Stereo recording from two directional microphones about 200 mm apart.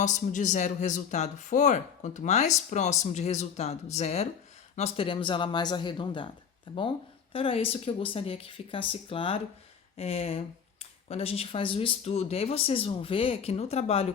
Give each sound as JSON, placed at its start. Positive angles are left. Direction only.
{"t": 0.0, "sound": "speech", "side_deg": 40}